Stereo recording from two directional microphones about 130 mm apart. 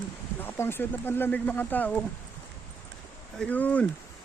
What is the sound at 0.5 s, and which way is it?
Speech, 20° left (ahead or behind).